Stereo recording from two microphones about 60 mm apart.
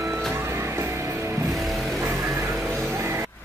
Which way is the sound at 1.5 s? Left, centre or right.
Centre.